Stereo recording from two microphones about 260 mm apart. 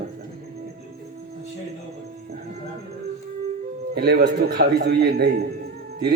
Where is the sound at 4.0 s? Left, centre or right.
Right.